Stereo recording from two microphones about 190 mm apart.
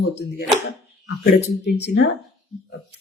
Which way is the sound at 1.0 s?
60° left (ahead or behind).